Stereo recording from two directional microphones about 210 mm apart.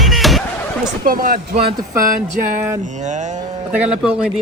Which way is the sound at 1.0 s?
45° right (ahead or behind).